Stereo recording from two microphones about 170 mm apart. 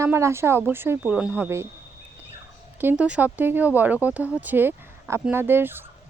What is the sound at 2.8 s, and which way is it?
Speech, 10° right (ahead or behind).